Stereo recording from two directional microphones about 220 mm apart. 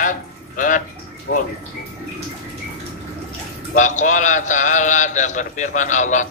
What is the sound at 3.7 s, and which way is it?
A man's voice, 35° left (ahead or behind).